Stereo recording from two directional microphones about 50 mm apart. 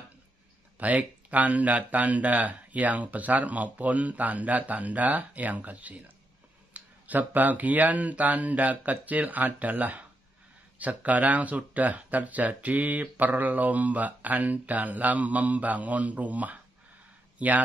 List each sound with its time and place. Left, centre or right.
0.7 s speech: right